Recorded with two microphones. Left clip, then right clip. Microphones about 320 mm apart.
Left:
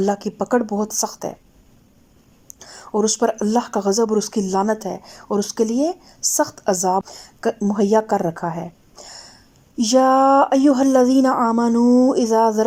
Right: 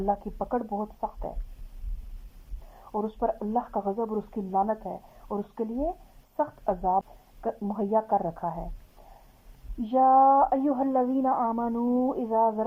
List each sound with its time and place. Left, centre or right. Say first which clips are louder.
0.0 s speech: left 8 dB; left
2.9 s speech: left 10 dB; left
9.8 s speech: left 5 dB; left